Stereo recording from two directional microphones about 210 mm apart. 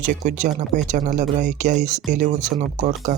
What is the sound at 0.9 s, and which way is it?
Speech, 35° right (ahead or behind).